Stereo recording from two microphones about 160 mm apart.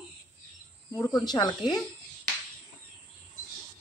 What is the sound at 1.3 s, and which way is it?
Speech, 25° left (ahead or behind).